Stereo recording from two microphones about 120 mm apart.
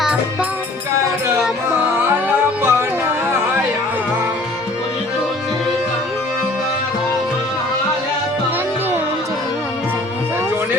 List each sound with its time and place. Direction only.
2.6 s music: 20° right (ahead or behind)